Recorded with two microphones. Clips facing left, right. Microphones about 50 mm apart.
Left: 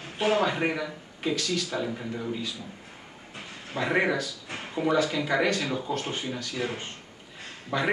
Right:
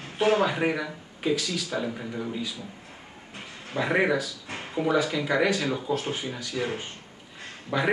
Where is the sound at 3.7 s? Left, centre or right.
Centre.